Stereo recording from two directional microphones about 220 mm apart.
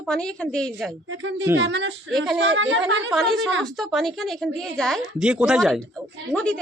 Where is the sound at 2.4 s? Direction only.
60° right (ahead or behind).